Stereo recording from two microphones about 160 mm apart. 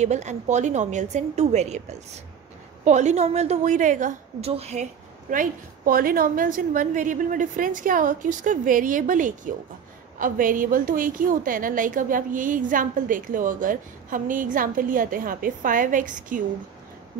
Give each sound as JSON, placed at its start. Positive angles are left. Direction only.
{"t": 0.0, "sound": "a woman's voice", "side_deg": -45}
{"t": 2.8, "sound": "a woman's voice", "side_deg": -45}
{"t": 4.5, "sound": "a woman's voice", "side_deg": -40}
{"t": 5.3, "sound": "a woman's voice", "side_deg": -60}